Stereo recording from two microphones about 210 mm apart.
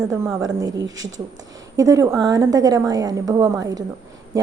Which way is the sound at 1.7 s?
15° right (ahead or behind).